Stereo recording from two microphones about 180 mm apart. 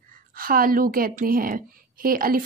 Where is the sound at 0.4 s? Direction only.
55° right (ahead or behind).